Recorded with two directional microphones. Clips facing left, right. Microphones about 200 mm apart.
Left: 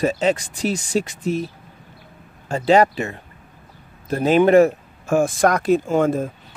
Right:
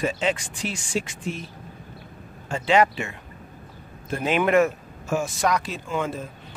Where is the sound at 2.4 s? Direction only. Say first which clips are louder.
Left 5 dB; 40° left (ahead or behind).